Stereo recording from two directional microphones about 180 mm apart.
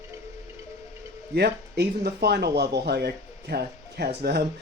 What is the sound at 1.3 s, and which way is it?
Speech, 65° right (ahead or behind).